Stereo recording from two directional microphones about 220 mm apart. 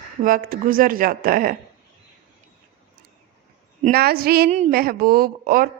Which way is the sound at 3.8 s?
45° right (ahead or behind).